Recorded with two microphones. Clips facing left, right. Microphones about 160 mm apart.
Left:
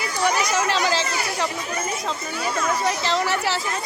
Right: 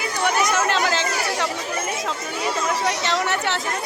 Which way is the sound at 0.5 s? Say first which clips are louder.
Even; centre (ahead or behind).